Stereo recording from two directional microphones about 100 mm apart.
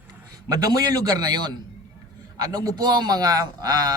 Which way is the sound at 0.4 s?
35° right (ahead or behind).